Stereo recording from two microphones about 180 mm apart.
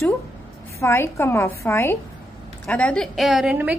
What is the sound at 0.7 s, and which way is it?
A woman's voice, 15° left (ahead or behind).